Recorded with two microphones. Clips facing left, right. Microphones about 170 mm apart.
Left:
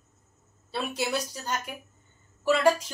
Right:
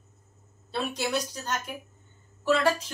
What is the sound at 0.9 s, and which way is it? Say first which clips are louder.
A woman's voice: even; 10° left (ahead or behind).